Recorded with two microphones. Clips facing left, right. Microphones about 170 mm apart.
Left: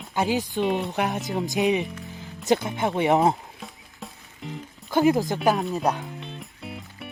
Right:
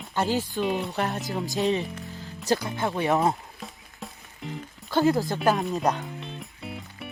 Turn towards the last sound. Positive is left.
turn(degrees=0)  # may be behind; listen again after turning